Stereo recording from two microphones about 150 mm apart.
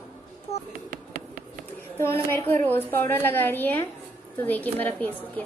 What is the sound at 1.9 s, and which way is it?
A woman's voice, 15° left (ahead or behind).